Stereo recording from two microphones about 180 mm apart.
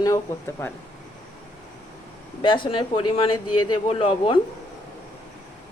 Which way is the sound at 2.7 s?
30° left (ahead or behind).